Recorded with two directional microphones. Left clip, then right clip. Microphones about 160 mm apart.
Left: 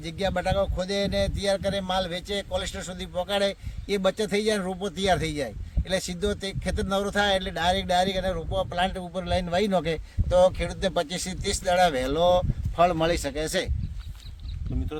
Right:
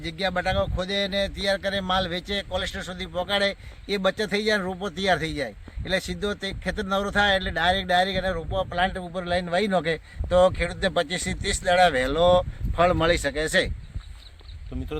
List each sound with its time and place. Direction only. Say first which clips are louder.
0.0 s a man's voice: right 1 dB; 35° left (ahead or behind)